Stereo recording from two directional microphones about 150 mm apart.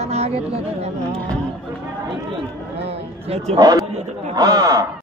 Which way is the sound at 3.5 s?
25° right (ahead or behind).